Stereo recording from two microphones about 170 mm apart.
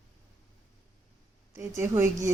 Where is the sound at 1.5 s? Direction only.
15° right (ahead or behind).